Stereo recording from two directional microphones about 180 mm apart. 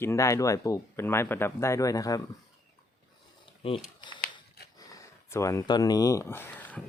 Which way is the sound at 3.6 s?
30° left (ahead or behind).